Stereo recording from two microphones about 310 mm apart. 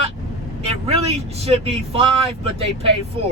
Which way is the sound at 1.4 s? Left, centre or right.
Centre.